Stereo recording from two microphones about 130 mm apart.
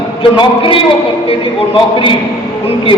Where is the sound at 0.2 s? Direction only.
40° left (ahead or behind).